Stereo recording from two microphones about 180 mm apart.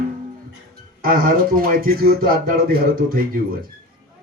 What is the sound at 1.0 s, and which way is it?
Speech, 50° right (ahead or behind).